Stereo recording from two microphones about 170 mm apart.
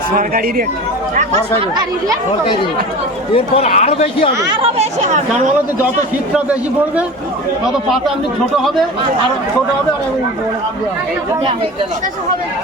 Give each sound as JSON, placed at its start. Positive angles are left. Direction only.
{"t": 0.2, "sound": "a man's voice", "side_deg": -55}
{"t": 1.1, "sound": "speech", "side_deg": -45}
{"t": 3.3, "sound": "speech", "side_deg": 35}
{"t": 4.5, "sound": "speech", "side_deg": -35}
{"t": 6.3, "sound": "a man's voice", "side_deg": -10}
{"t": 8.5, "sound": "speech", "side_deg": 0}